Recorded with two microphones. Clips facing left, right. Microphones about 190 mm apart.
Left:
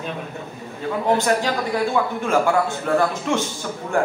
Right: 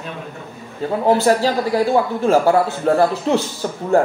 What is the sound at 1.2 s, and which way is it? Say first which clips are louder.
Speech: right 5 dB; 35° right (ahead or behind).